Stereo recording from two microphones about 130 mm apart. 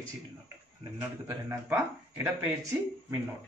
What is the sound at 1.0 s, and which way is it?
A man's voice, 20° right (ahead or behind).